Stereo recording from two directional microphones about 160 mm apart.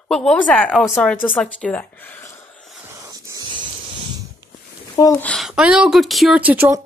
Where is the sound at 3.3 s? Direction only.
25° right (ahead or behind).